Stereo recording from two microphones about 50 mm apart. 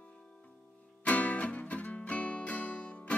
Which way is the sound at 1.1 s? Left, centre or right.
Left.